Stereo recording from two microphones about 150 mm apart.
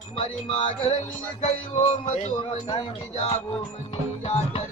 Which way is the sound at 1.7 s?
50° left (ahead or behind).